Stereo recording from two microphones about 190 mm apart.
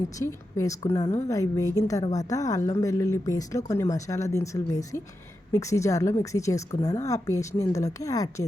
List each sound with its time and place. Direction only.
0.2 s a woman's voice: 15° left (ahead or behind)